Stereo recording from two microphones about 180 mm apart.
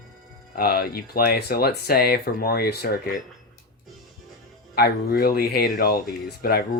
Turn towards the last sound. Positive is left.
turn(degrees=55)  # may be behind; listen again after turning